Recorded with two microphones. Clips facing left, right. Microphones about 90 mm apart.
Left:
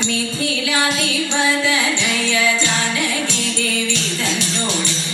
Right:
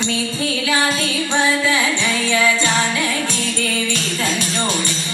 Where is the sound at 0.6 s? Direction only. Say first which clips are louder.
Right 1 dB; 35° right (ahead or behind).